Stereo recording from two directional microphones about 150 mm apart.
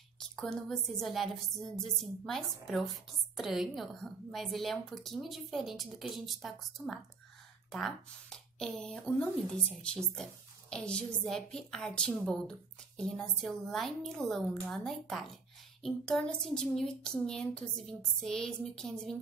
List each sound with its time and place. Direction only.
0.2 s a woman's voice: 5° left (ahead or behind)